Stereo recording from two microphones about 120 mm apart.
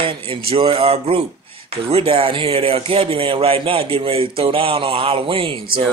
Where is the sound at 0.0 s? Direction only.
50° right (ahead or behind).